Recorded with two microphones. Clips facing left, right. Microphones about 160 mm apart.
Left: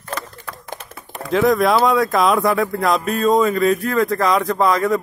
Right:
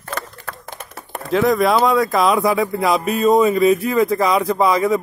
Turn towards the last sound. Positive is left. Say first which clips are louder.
# right 1 dB
turn(degrees=-5)  # may be behind; listen again after turning